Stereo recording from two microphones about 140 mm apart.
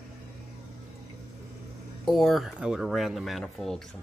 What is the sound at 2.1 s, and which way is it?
Speech, centre (ahead or behind).